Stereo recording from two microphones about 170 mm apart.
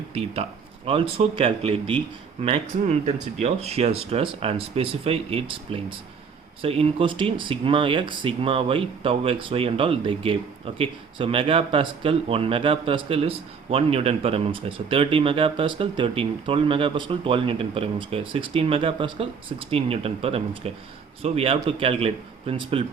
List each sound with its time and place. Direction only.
0.1 s speech: 35° right (ahead or behind)